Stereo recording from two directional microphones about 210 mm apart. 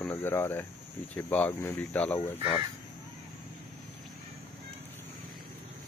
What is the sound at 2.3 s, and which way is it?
Speech, 25° left (ahead or behind).